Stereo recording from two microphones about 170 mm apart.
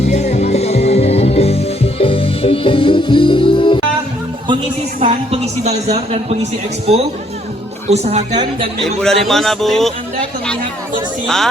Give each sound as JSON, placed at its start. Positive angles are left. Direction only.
{"t": 0.1, "sound": "music", "side_deg": 40}
{"t": 4.9, "sound": "a woman's voice", "side_deg": -40}
{"t": 8.8, "sound": "a man's voice", "side_deg": 5}